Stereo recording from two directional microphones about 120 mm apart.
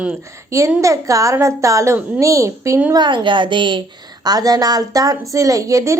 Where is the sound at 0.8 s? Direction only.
25° right (ahead or behind).